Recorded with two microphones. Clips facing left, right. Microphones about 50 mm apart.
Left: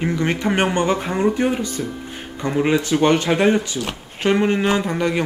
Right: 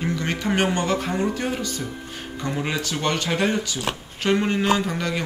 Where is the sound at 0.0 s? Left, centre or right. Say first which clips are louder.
Left 5 dB; left.